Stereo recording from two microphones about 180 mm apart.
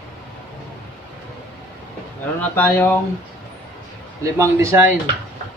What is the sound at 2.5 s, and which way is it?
Speech, 10° left (ahead or behind).